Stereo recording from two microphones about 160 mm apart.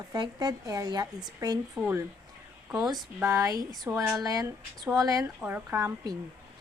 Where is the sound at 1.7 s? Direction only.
5° right (ahead or behind).